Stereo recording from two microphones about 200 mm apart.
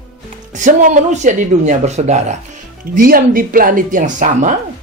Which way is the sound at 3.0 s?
45° right (ahead or behind).